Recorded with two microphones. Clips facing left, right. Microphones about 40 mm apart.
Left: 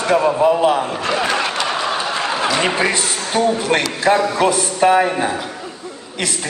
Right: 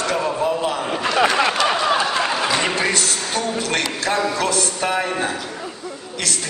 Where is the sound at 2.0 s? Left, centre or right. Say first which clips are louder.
Left 1 dB; centre.